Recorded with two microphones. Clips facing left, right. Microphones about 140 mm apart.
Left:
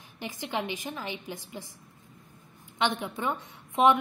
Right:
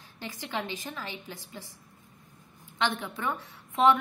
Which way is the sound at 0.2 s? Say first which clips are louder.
Left 2 dB; 15° left (ahead or behind).